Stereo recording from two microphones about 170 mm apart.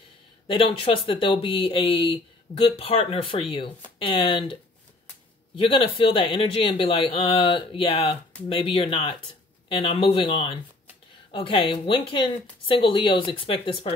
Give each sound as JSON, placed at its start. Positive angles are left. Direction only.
{"t": 0.5, "sound": "speech", "side_deg": 30}
{"t": 5.6, "sound": "speech", "side_deg": 30}